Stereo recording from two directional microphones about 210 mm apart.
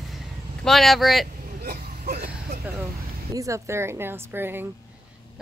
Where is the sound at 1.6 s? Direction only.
45° right (ahead or behind).